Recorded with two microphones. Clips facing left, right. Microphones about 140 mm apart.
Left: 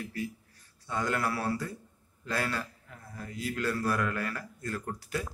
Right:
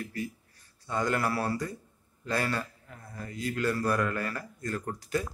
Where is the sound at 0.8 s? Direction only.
Centre (ahead or behind).